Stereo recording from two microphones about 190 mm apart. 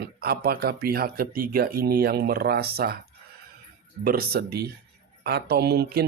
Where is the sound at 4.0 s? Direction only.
50° right (ahead or behind).